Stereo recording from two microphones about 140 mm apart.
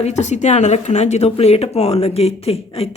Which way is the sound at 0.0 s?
55° left (ahead or behind).